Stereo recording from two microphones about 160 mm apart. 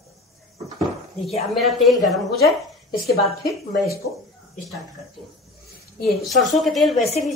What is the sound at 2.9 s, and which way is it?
Speech, 70° left (ahead or behind).